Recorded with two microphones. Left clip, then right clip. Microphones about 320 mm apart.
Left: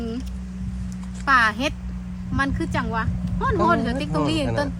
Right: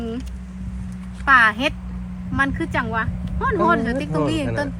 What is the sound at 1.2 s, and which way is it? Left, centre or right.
Speech, centre.